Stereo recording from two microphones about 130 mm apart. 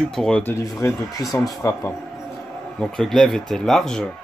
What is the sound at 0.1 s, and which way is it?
Speech, 5° left (ahead or behind).